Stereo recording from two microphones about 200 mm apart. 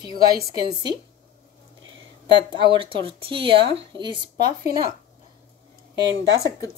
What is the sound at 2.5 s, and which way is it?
Speech, 25° right (ahead or behind).